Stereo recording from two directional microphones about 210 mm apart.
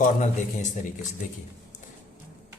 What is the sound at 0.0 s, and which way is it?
Speech, 35° left (ahead or behind).